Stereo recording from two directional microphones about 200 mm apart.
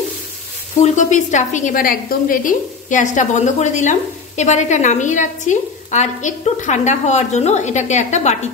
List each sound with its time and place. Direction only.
0.7 s a woman's voice: 35° left (ahead or behind)